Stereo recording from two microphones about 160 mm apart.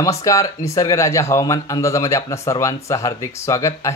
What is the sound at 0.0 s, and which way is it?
Speech, 20° left (ahead or behind).